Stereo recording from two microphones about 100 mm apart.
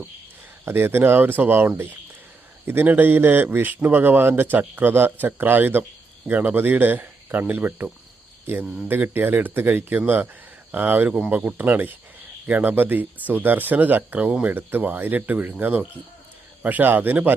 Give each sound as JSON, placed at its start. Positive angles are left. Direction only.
{"t": 0.6, "sound": "a man's voice", "side_deg": -25}
{"t": 8.9, "sound": "a man's voice", "side_deg": -20}